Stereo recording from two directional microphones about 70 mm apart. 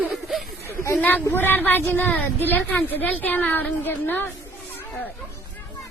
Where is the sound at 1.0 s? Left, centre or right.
Left.